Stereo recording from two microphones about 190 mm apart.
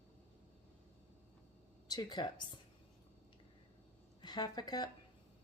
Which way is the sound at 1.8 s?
20° left (ahead or behind).